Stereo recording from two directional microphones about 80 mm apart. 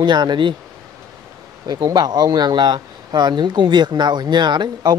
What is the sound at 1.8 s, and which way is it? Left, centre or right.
Speech, right.